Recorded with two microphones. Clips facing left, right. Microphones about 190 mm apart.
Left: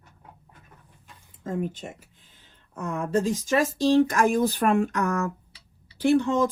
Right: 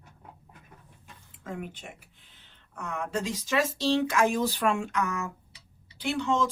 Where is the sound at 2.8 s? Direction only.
50° left (ahead or behind).